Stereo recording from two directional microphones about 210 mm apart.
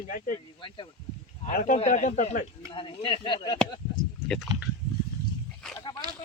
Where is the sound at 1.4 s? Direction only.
35° left (ahead or behind).